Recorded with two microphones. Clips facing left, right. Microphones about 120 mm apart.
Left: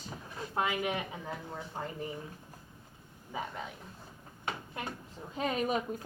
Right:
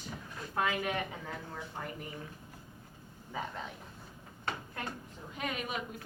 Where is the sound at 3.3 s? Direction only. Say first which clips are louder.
Left 1 dB; 10° left (ahead or behind).